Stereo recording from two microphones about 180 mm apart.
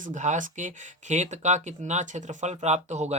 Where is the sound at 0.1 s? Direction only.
40° right (ahead or behind).